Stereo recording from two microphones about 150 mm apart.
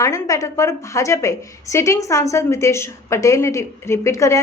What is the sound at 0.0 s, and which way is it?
A woman's voice, 20° left (ahead or behind).